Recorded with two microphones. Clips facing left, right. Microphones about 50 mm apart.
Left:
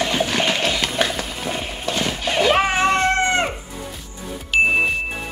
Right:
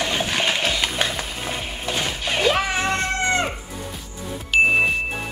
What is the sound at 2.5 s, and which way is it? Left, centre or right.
Music, left.